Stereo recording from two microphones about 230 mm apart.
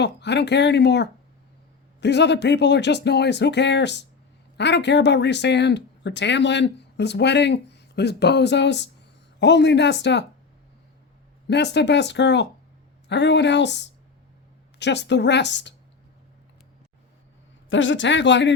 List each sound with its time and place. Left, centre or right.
0.0 s speech: left
11.4 s speech: left
17.7 s speech: left